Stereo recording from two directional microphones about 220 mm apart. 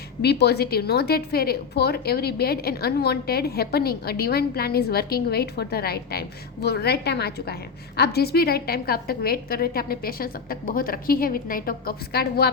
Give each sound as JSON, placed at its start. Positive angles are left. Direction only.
{"t": 0.2, "sound": "a woman's voice", "side_deg": 45}